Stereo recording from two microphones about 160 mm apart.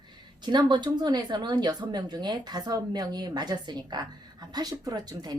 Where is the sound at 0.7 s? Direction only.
25° right (ahead or behind).